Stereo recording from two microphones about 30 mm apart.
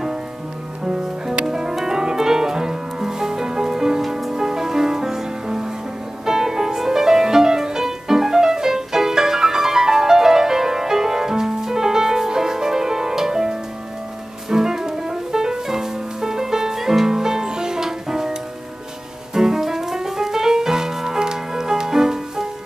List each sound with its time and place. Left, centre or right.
0.8 s music: centre
6.2 s music: centre
19.3 s music: centre